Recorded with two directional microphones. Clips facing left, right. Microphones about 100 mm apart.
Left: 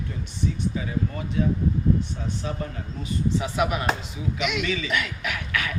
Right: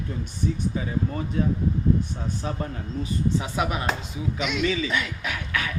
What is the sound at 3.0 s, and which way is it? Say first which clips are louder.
Speech: even; 30° right (ahead or behind).